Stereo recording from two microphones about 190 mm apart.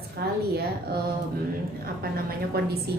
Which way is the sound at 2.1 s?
50° right (ahead or behind).